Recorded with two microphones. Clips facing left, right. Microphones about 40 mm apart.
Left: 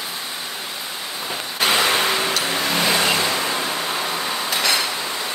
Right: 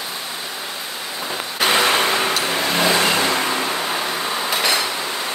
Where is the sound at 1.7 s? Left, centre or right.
Right.